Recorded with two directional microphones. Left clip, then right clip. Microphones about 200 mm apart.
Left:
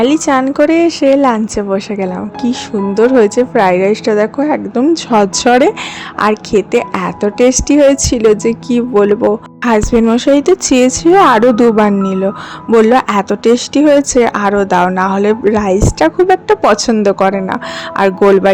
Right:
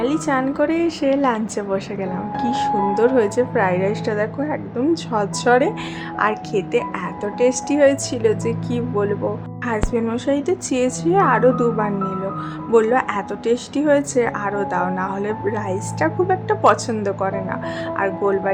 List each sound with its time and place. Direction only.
0.0 s a woman's voice: 40° left (ahead or behind)